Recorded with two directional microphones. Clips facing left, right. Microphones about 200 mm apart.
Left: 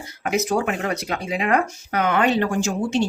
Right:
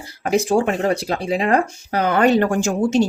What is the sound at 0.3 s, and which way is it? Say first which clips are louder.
Speech: right 4 dB; 30° right (ahead or behind).